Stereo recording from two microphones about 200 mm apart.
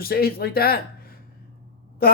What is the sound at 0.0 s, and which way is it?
Speech, 50° left (ahead or behind).